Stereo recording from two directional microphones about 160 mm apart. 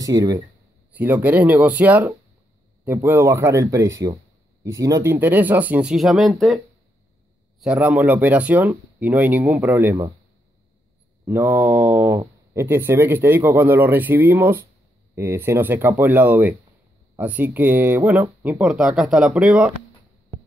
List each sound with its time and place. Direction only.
0.0 s a man's voice: 20° right (ahead or behind)
0.9 s a man's voice: 10° right (ahead or behind)
7.6 s speech: 10° right (ahead or behind)
11.2 s speech: 10° right (ahead or behind)